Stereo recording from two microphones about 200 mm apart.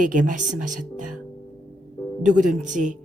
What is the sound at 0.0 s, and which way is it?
A woman's voice, 40° right (ahead or behind).